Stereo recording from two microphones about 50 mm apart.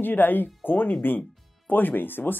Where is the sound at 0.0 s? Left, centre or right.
Left.